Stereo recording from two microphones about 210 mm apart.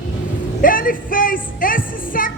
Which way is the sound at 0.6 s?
40° left (ahead or behind).